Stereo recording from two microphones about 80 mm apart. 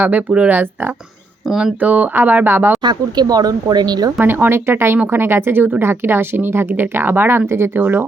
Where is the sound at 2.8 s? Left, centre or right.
Right.